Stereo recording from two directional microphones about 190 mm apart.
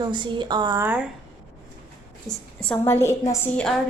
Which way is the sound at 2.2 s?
5° left (ahead or behind).